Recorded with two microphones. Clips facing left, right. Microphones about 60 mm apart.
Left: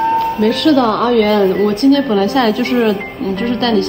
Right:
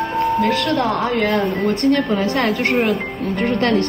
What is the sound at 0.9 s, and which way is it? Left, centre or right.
Speech, left.